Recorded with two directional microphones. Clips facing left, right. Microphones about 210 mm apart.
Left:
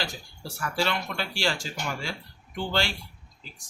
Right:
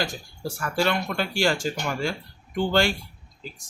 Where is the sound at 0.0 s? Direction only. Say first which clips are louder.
Right 6 dB; 45° right (ahead or behind).